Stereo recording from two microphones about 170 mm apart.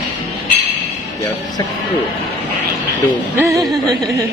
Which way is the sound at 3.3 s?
15° right (ahead or behind).